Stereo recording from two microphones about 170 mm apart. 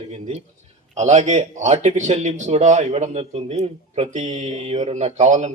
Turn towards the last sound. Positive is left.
turn(degrees=-45)  # may be behind; listen again after turning